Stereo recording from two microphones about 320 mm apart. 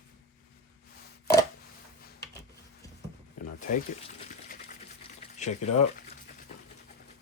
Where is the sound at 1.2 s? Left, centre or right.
Centre.